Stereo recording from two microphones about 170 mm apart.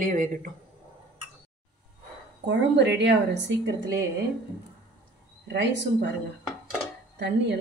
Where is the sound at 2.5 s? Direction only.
90° right.